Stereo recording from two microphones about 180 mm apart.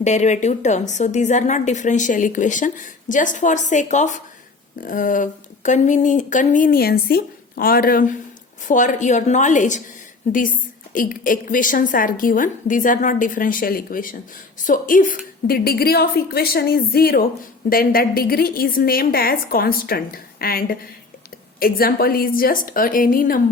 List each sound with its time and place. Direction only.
0.0 s a woman's voice: 40° left (ahead or behind)
10.9 s a woman's voice: 50° left (ahead or behind)